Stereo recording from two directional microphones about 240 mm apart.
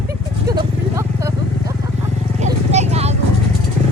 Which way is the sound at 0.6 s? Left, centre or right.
Centre.